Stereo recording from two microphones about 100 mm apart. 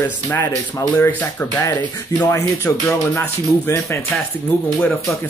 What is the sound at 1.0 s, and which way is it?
Speech, 20° left (ahead or behind).